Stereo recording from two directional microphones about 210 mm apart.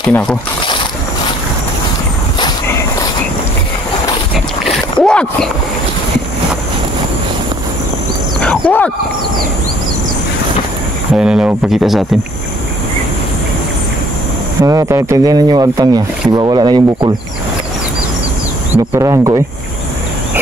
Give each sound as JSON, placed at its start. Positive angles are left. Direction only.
{"t": 0.0, "sound": "speech", "side_deg": 10}
{"t": 5.0, "sound": "speech", "side_deg": 5}
{"t": 8.4, "sound": "a sound", "side_deg": 5}
{"t": 11.1, "sound": "speech", "side_deg": -5}
{"t": 14.6, "sound": "speech", "side_deg": -15}
{"t": 18.9, "sound": "speech", "side_deg": -15}